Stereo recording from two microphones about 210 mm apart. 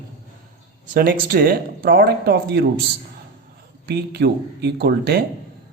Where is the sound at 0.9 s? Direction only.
45° right (ahead or behind).